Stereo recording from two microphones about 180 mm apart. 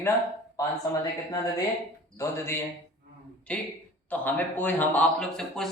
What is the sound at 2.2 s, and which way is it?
A man's voice, 15° left (ahead or behind).